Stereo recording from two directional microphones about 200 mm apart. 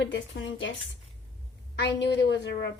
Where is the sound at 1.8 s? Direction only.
60° left (ahead or behind).